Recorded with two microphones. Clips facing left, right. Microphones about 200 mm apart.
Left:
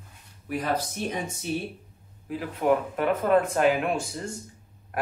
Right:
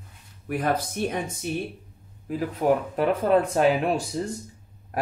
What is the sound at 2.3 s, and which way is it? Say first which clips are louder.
Speech: right 1 dB; 40° right (ahead or behind).